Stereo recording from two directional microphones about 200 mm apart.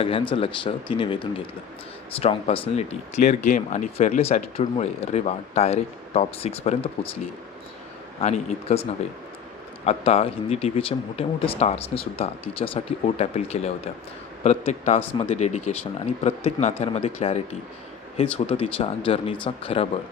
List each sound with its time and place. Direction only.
0.0 s speech: 30° left (ahead or behind)
8.2 s speech: 35° left (ahead or behind)